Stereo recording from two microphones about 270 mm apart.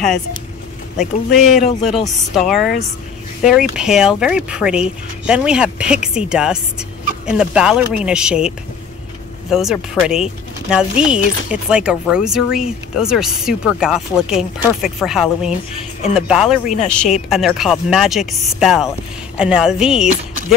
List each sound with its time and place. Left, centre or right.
0.9 s speech: centre